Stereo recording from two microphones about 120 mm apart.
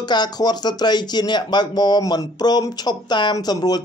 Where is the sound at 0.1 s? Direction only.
35° left (ahead or behind).